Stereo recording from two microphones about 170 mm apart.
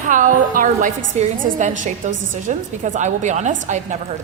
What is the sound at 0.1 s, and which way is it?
A woman's voice, 50° right (ahead or behind).